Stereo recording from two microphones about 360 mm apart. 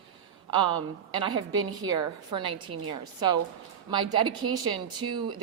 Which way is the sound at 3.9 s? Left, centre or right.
Centre.